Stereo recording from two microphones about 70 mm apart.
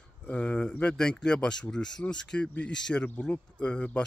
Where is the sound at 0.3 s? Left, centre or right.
Centre.